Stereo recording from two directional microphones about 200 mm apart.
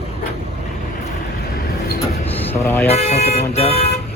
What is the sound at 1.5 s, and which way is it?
Vehicle, 50° left (ahead or behind).